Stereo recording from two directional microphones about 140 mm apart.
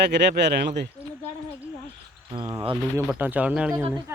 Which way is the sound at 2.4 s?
25° right (ahead or behind).